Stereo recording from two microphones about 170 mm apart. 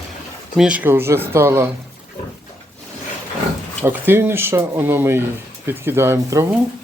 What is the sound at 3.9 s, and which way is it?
Speech, 10° right (ahead or behind).